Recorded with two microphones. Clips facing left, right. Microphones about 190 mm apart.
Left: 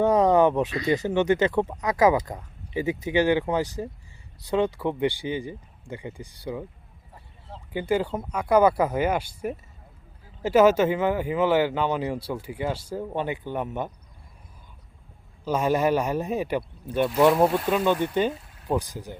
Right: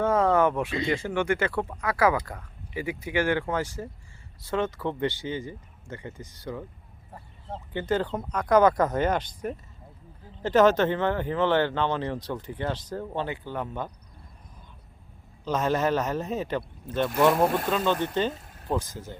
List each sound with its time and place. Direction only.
0.0 s a sound: 15° left (ahead or behind)
1.0 s speech: 20° left (ahead or behind)
7.7 s speech: 10° left (ahead or behind)
15.4 s speech: 10° left (ahead or behind)